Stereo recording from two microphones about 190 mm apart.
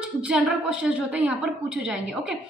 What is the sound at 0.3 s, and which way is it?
A woman's voice, 5° right (ahead or behind).